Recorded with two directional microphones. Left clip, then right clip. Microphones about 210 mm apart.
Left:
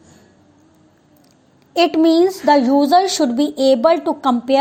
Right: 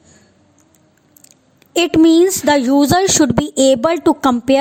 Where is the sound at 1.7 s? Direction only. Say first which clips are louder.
Right 2 dB; 70° right (ahead or behind).